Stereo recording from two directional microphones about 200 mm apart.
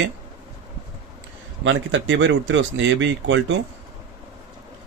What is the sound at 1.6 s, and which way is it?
Speech, 70° right (ahead or behind).